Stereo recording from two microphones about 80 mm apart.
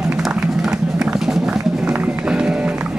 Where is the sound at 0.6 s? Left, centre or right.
Centre.